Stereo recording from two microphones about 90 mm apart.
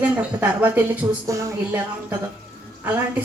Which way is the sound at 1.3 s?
35° right (ahead or behind).